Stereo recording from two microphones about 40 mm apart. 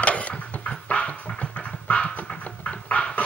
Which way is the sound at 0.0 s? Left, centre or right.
Left.